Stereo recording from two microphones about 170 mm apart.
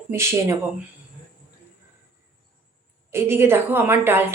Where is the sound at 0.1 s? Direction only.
15° right (ahead or behind).